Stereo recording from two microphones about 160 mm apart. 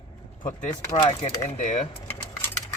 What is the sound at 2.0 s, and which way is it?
Keys jangling, 15° left (ahead or behind).